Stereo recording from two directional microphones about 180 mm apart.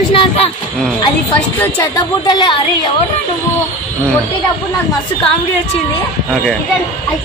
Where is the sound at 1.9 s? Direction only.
25° left (ahead or behind).